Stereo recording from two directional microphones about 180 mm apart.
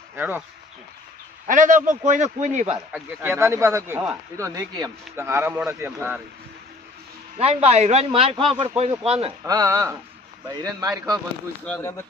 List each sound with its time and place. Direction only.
0.2 s speech: 10° right (ahead or behind)
1.5 s a man's voice: 45° right (ahead or behind)
2.9 s speech: 15° right (ahead or behind)
7.3 s a man's voice: 35° right (ahead or behind)
9.5 s speech: 20° right (ahead or behind)
11.6 s speech: 10° left (ahead or behind)